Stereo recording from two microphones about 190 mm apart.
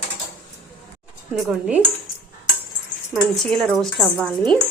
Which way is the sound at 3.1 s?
Centre (ahead or behind).